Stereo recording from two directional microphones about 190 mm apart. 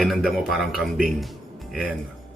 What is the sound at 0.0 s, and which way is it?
Speech, centre (ahead or behind).